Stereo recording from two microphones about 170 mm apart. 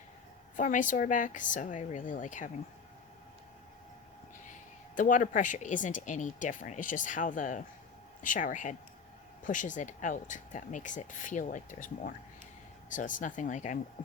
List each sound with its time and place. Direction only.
0.5 s speech: 50° left (ahead or behind)
4.9 s speech: 50° left (ahead or behind)